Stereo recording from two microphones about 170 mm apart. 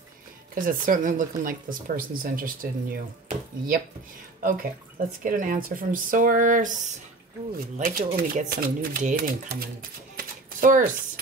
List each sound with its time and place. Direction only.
0.6 s speech: 55° right (ahead or behind)
10.1 s typewriter: 55° right (ahead or behind)